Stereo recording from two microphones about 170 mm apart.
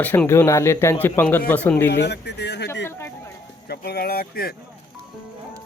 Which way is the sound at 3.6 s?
65° left (ahead or behind).